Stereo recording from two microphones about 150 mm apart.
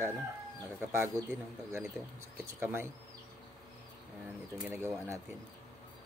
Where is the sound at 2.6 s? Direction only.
15° right (ahead or behind).